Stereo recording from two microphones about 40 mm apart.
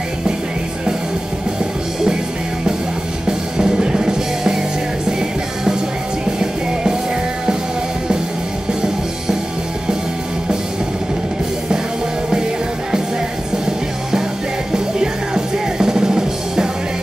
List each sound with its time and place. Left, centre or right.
3.3 s music: centre
6.4 s music: centre
14.7 s music: centre